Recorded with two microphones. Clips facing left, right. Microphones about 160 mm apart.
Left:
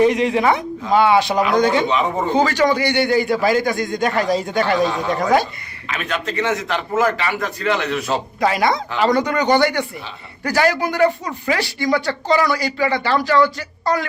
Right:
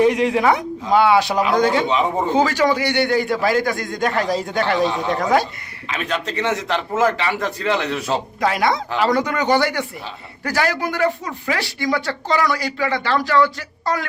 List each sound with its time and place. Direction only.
0.0 s a man's voice: 5° right (ahead or behind)
6.0 s a man's voice: 30° right (ahead or behind)
8.4 s speech: centre (ahead or behind)